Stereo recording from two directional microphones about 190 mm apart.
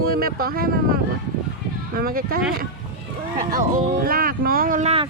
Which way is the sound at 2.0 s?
50° right (ahead or behind).